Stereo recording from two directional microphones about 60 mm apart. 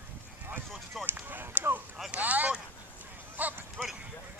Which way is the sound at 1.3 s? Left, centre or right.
Right.